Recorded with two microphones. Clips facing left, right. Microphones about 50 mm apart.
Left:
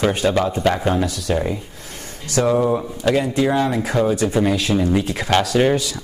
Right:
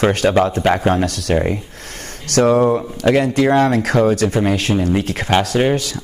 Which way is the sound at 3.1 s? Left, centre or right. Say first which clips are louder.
Right 4 dB; right.